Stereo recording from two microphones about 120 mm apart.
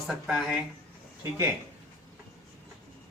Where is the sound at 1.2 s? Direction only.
25° right (ahead or behind).